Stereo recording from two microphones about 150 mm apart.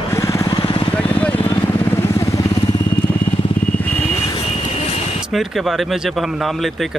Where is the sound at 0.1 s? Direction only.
20° left (ahead or behind); by 0.9 s 35° left (ahead or behind).